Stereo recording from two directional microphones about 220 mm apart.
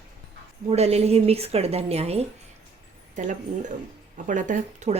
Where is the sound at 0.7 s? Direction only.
30° right (ahead or behind).